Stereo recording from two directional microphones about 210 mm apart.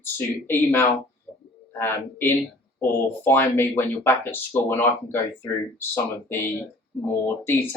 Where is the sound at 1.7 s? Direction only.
10° left (ahead or behind).